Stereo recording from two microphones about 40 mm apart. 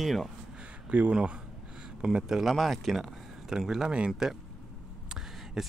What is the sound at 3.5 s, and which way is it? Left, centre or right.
Speech, right.